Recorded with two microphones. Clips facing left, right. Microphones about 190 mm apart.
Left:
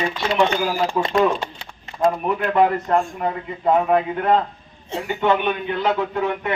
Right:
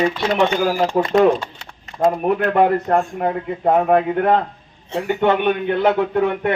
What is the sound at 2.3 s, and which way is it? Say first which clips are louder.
A man's voice: right 4 dB; 55° right (ahead or behind).